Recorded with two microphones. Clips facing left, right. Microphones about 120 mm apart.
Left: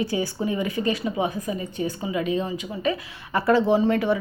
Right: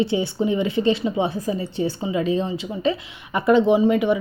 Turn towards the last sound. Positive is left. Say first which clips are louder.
# right 3 dB
turn(degrees=-15)  # may be behind; listen again after turning